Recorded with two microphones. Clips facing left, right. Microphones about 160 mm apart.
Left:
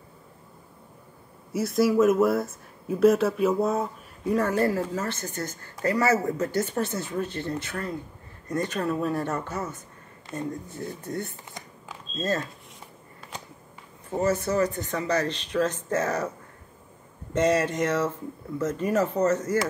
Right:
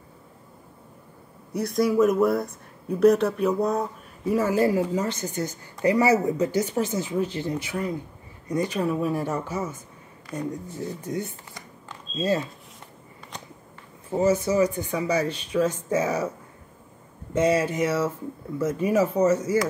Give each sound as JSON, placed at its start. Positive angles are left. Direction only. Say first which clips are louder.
{"t": 1.5, "sound": "speech", "louder": "even", "side_deg": 5}
{"t": 10.8, "sound": "speech", "louder": "right 4 dB", "side_deg": -10}
{"t": 14.1, "sound": "speech", "louder": "right 3 dB", "side_deg": -10}